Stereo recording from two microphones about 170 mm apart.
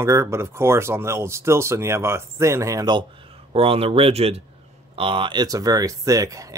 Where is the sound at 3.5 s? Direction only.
35° right (ahead or behind).